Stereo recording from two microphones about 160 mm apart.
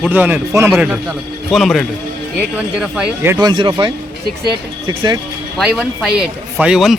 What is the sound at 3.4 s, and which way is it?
Speech, 30° right (ahead or behind).